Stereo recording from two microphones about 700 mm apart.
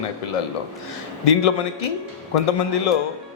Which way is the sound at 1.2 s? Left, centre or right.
Left.